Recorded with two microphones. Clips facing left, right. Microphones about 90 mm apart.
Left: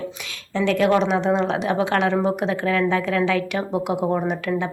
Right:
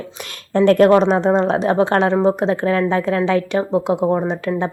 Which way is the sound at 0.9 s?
40° right (ahead or behind).